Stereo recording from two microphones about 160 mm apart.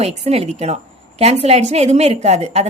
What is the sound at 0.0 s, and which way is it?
A woman's voice, 40° right (ahead or behind).